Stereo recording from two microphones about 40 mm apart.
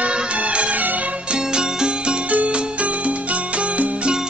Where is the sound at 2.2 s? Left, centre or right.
Right.